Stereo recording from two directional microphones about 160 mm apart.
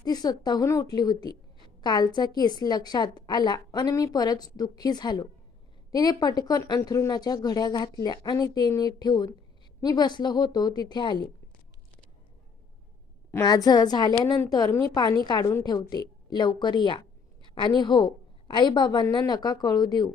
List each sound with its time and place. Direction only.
0.0 s a woman's voice: 25° left (ahead or behind)
13.4 s a woman's voice: 25° left (ahead or behind)